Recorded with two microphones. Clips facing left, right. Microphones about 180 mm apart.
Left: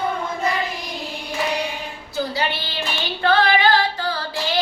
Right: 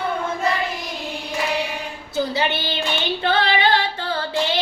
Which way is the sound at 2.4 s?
25° right (ahead or behind).